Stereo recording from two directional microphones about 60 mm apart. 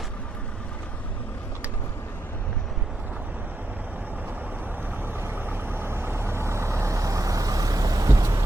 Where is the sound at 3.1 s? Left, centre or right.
Right.